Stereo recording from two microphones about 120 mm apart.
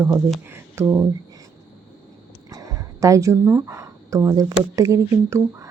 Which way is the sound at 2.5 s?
30° right (ahead or behind).